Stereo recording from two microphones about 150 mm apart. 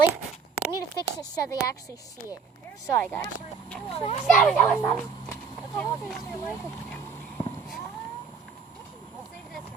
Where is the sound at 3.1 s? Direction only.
10° left (ahead or behind).